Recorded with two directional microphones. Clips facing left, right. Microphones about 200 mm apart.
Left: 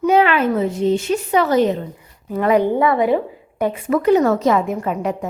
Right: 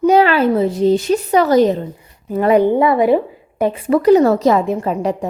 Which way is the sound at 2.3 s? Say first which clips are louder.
Right 3 dB; 30° right (ahead or behind).